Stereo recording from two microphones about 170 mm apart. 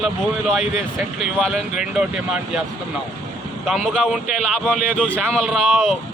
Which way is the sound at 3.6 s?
Centre (ahead or behind).